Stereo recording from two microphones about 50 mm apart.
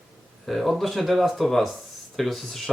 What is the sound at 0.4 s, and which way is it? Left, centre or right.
Speech, centre.